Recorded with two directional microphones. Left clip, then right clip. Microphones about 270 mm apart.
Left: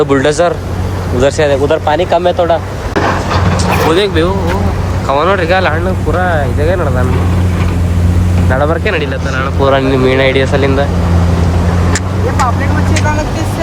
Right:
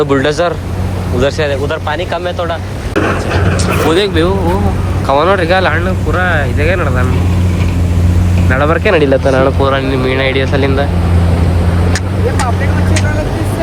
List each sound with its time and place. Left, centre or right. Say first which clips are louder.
0.0 s speech: left 2 dB; centre; by 3.2 s left
3.9 s speech: even; centre
8.4 s speech: right 2 dB; centre
9.6 s speech: left 3 dB; centre